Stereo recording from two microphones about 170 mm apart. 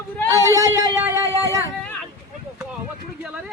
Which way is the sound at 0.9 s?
15° right (ahead or behind).